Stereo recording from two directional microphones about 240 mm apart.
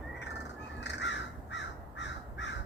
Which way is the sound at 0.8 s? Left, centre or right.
Left.